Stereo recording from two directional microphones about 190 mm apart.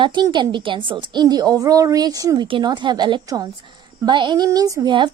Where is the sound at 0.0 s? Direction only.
25° right (ahead or behind).